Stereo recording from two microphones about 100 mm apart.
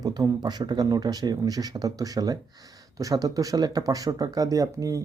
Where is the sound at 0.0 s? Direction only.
40° right (ahead or behind).